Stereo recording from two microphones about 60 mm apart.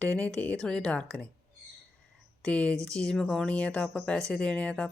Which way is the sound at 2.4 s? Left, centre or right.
Centre.